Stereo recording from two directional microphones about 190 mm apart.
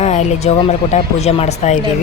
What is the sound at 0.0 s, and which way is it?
Speech, 35° left (ahead or behind).